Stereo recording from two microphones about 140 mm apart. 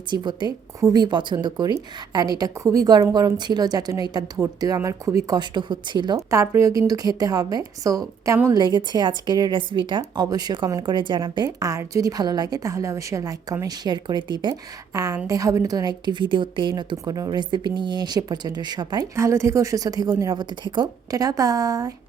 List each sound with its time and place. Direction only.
0.1 s a woman's voice: 30° right (ahead or behind)
6.1 s a woman's voice: 20° right (ahead or behind)
11.4 s a woman's voice: 20° right (ahead or behind)